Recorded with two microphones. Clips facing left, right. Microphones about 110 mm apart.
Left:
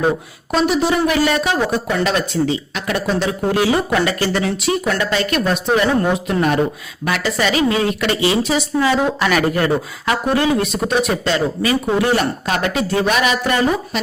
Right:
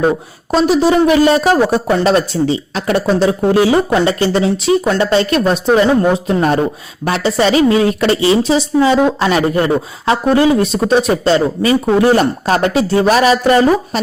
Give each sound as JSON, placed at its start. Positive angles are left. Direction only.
{"t": 0.5, "sound": "a woman's voice", "side_deg": -35}